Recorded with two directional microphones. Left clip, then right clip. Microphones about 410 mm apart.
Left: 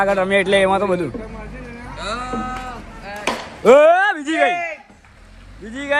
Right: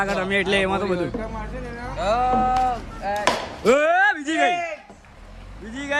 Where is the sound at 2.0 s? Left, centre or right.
Centre.